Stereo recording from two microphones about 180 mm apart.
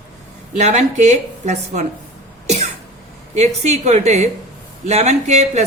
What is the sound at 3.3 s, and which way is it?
A man's voice, 40° right (ahead or behind).